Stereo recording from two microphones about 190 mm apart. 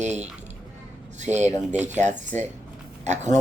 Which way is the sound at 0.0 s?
35° right (ahead or behind).